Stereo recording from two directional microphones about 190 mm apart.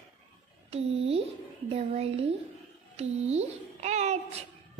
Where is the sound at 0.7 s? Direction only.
30° right (ahead or behind).